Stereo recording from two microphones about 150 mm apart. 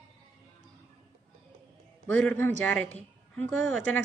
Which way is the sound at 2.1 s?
10° left (ahead or behind).